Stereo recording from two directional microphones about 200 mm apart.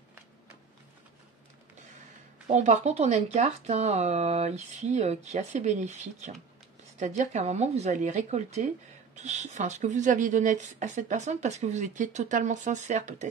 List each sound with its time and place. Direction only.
2.4 s speech: 35° right (ahead or behind)